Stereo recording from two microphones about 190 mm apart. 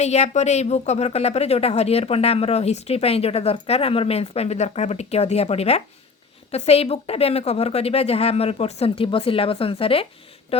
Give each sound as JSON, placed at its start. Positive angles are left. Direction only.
{"t": 0.0, "sound": "speech", "side_deg": 35}